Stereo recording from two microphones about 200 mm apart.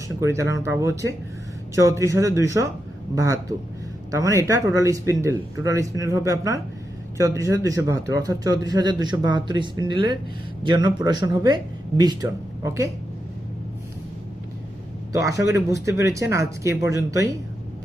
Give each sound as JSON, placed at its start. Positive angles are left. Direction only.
{"t": 0.2, "sound": "a man's voice", "side_deg": -15}
{"t": 15.1, "sound": "a man's voice", "side_deg": -15}